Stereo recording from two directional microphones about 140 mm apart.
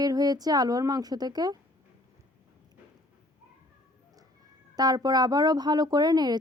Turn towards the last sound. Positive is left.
turn(degrees=-30)  # may be behind; listen again after turning